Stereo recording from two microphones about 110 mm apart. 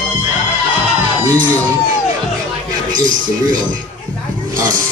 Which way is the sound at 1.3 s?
15° left (ahead or behind).